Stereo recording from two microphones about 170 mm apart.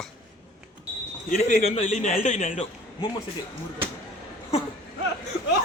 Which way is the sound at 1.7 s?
40° left (ahead or behind).